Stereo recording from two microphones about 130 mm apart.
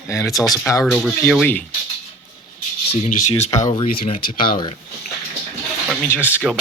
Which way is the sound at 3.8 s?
90° left.